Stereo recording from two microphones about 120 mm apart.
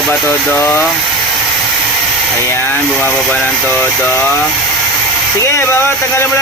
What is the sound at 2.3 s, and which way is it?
Speech, 20° left (ahead or behind).